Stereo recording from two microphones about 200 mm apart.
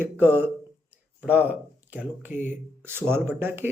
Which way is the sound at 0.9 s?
10° right (ahead or behind).